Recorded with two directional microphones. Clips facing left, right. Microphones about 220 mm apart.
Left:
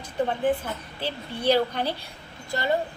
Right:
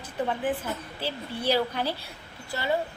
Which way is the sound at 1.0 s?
5° right (ahead or behind).